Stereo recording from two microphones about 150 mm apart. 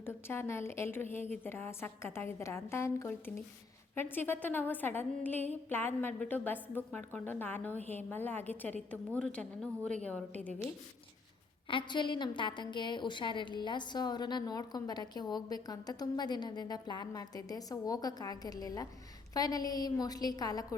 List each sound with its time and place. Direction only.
0.0 s a woman's voice: 15° left (ahead or behind)
11.7 s a woman's voice: 30° left (ahead or behind)